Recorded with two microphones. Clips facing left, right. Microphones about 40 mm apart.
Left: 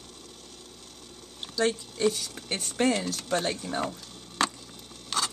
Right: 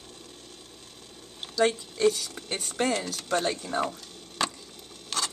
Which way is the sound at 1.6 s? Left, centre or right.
Centre.